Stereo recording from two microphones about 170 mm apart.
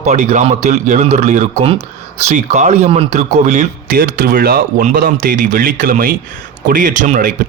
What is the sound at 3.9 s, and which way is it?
Speech, 60° right (ahead or behind).